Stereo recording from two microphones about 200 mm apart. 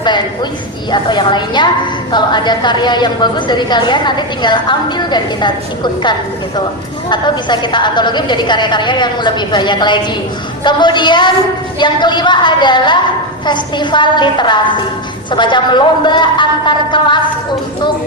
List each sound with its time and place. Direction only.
0.9 s a woman's voice: 20° left (ahead or behind)